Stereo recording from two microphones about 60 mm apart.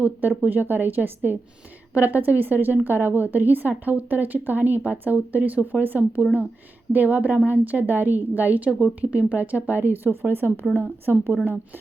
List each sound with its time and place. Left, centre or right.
0.0 s a woman's voice: right